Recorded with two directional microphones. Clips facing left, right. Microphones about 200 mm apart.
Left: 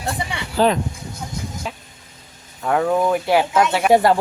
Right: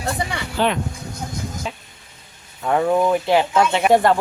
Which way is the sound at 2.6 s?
5° right (ahead or behind).